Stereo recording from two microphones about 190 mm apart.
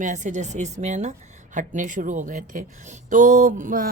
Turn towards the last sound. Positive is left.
turn(degrees=-45)  # may be behind; listen again after turning